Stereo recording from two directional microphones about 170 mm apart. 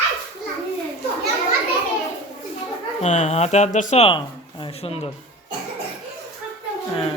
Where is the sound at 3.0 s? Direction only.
45° left (ahead or behind).